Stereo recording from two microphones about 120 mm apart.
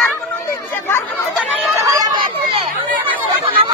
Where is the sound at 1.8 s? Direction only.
30° right (ahead or behind).